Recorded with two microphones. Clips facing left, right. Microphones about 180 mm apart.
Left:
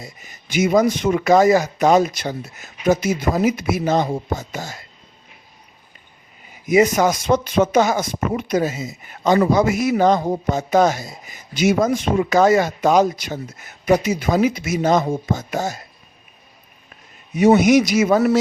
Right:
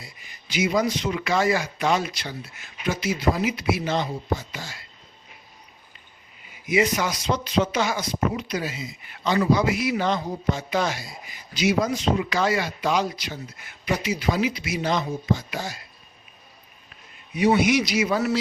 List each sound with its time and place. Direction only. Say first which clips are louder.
0.0 s speech: left 7 dB; 45° left (ahead or behind)
6.7 s speech: left 7 dB; 45° left (ahead or behind)
17.3 s speech: left 7 dB; 45° left (ahead or behind)